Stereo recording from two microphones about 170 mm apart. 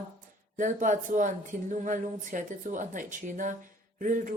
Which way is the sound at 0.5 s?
50° right (ahead or behind).